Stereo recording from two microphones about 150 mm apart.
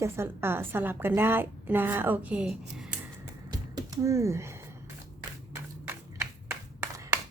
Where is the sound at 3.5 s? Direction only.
25° right (ahead or behind).